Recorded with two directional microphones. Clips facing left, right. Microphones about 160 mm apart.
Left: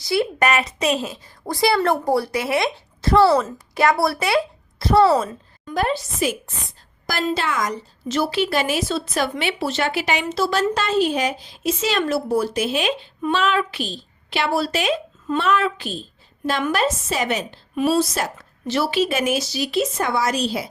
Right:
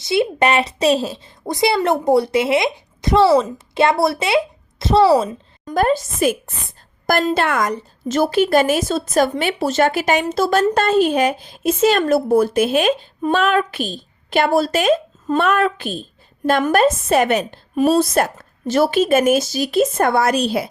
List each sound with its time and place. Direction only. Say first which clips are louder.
0.0 s a woman's voice: right 3 dB; 25° right (ahead or behind)
1.5 s a woman's voice: right 2 dB; 20° right (ahead or behind)
5.6 s a woman's voice: right 5 dB; 45° right (ahead or behind)